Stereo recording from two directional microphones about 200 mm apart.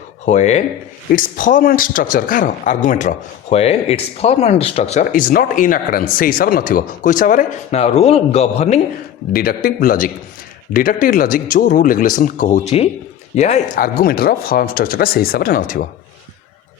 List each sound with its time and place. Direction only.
0.3 s speech: 35° left (ahead or behind)
9.3 s speech: 45° left (ahead or behind)